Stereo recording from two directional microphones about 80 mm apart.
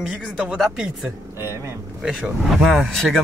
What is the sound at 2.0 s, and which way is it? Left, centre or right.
Speech, centre.